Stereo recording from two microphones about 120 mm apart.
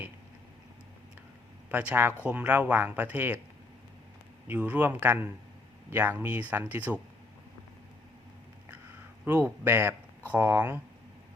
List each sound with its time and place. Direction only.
1.7 s speech: 15° right (ahead or behind)
4.4 s speech: 15° right (ahead or behind)
9.2 s speech: 20° right (ahead or behind)